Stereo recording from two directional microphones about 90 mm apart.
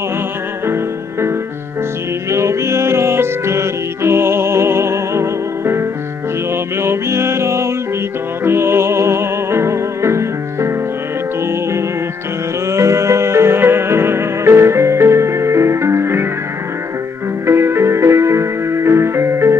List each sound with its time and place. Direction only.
2.3 s music: 30° right (ahead or behind)
12.6 s music: 30° right (ahead or behind)
17.5 s music: 30° right (ahead or behind)